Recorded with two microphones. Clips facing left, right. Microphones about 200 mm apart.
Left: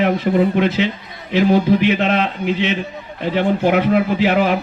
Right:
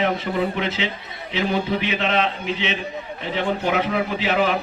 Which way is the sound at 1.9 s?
55° left (ahead or behind).